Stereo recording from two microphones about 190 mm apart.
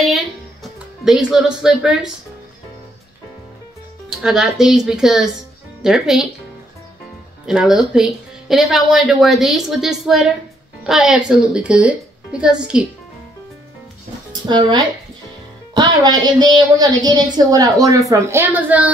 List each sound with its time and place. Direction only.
1.0 s a woman's voice: centre (ahead or behind)
4.2 s a woman's voice: centre (ahead or behind)
7.4 s a woman's voice: centre (ahead or behind)
14.3 s a woman's voice: 25° right (ahead or behind)